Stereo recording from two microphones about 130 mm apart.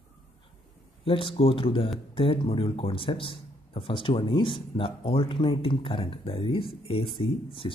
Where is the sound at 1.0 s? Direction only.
45° left (ahead or behind).